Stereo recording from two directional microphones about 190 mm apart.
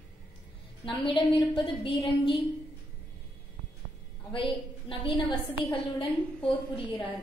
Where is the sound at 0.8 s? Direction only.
25° left (ahead or behind).